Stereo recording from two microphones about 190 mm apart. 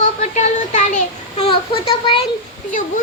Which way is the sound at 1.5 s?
25° left (ahead or behind).